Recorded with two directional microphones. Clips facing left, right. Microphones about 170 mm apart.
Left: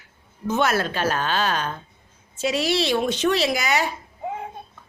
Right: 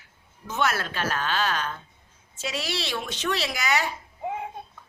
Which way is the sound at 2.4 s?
15° left (ahead or behind).